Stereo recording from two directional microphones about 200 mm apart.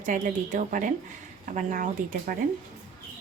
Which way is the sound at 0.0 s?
40° right (ahead or behind).